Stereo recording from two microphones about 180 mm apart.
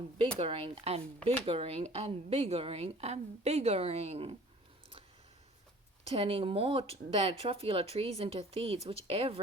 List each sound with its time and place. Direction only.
0.3 s speech: 30° right (ahead or behind)
6.1 s speech: 30° right (ahead or behind)